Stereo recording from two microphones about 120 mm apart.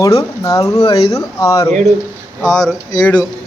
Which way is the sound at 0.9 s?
55° left (ahead or behind).